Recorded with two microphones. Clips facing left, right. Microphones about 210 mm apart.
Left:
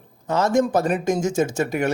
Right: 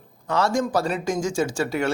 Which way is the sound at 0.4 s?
20° left (ahead or behind).